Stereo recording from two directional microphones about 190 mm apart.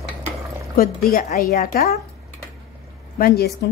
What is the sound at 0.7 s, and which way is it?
A woman's voice, 50° left (ahead or behind).